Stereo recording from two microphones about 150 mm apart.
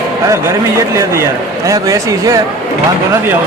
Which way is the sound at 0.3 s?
20° right (ahead or behind).